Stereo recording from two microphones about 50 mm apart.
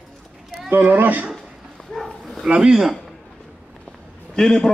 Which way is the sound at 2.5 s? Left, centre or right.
Centre.